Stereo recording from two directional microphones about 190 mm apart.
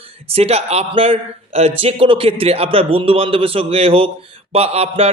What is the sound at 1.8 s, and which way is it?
A man's voice, 30° right (ahead or behind).